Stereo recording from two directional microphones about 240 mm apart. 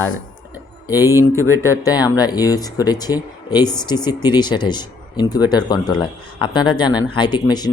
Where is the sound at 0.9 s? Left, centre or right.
Centre.